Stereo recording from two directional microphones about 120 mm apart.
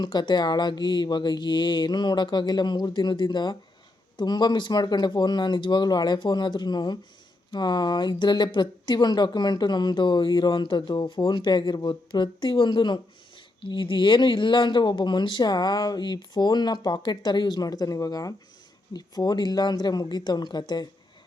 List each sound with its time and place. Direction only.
0.0 s speech: 40° left (ahead or behind)